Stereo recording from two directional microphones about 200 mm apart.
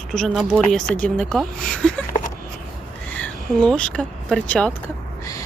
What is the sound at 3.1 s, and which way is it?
Speech, 5° left (ahead or behind).